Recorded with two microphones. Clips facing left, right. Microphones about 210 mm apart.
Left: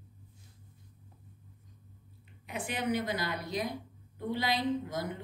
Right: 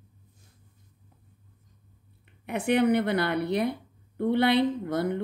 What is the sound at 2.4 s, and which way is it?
A woman's voice, 65° right (ahead or behind).